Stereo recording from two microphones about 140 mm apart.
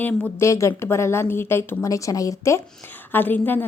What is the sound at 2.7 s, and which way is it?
Speech, 10° left (ahead or behind).